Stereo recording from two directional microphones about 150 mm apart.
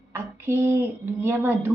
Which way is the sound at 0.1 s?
15° right (ahead or behind).